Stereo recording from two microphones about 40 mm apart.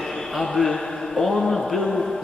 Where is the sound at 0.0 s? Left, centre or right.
Centre.